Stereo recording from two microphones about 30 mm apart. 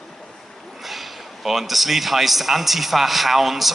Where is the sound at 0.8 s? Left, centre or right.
Centre.